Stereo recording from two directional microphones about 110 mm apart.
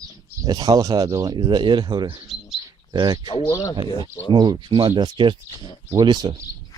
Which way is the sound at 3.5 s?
30° left (ahead or behind).